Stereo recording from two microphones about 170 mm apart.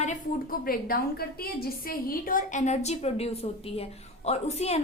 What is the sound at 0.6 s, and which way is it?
A woman's voice, 60° left (ahead or behind).